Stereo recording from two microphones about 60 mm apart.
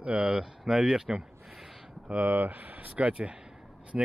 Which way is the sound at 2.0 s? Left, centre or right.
Right.